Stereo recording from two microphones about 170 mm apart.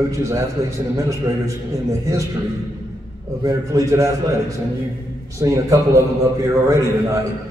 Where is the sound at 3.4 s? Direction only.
20° right (ahead or behind).